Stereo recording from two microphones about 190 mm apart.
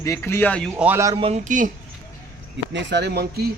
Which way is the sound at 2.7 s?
65° right (ahead or behind).